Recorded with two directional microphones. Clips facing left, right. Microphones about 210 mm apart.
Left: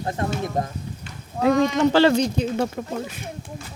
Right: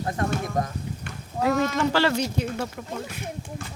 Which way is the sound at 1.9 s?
20° left (ahead or behind).